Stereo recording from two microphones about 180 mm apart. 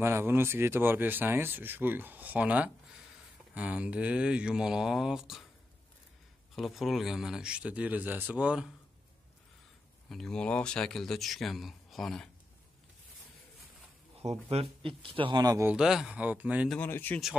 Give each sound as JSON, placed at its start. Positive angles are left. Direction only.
{"t": 0.0, "sound": "speech", "side_deg": -15}
{"t": 6.5, "sound": "speech", "side_deg": 0}
{"t": 10.0, "sound": "speech", "side_deg": 0}
{"t": 14.1, "sound": "speech", "side_deg": -35}
{"t": 15.7, "sound": "speech", "side_deg": -5}
{"t": 16.7, "sound": "speech", "side_deg": 10}